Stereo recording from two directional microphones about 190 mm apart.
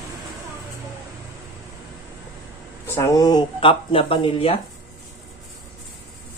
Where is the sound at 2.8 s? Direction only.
15° left (ahead or behind).